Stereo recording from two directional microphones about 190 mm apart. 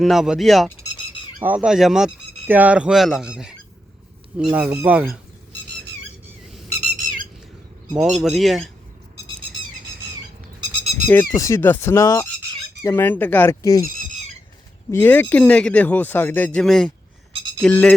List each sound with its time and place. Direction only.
0.0 s speech: centre (ahead or behind)
4.5 s speech: 10° right (ahead or behind)
6.9 s squawk: 45° right (ahead or behind)
8.2 s speech: centre (ahead or behind)
10.6 s goat: 30° right (ahead or behind)
11.1 s speech: 10° left (ahead or behind)